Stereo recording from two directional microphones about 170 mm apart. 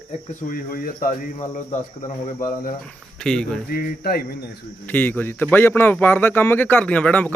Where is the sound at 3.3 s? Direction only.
5° left (ahead or behind).